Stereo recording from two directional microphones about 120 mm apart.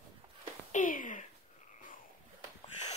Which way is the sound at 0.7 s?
90° left.